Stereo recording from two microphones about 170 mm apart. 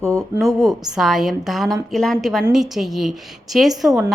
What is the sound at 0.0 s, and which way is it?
Speech, 15° right (ahead or behind).